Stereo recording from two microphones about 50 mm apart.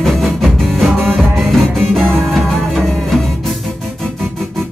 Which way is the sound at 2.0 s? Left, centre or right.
Right.